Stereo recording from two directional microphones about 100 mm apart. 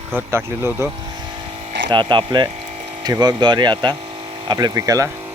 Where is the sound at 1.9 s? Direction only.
55° right (ahead or behind).